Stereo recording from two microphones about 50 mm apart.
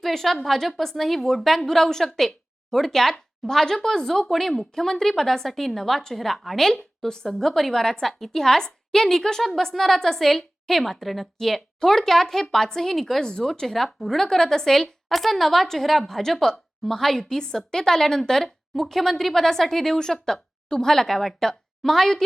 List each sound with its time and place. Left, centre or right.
0.0 s a woman's voice: centre